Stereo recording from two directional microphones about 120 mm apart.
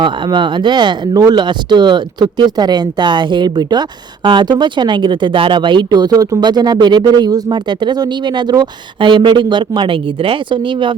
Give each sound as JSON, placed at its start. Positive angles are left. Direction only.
{"t": 0.0, "sound": "speech", "side_deg": -40}